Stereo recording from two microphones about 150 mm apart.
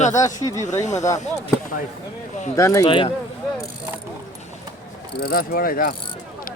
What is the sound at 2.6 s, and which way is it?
Speech, 20° left (ahead or behind).